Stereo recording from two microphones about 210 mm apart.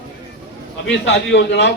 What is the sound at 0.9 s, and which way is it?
Speech, 60° left (ahead or behind).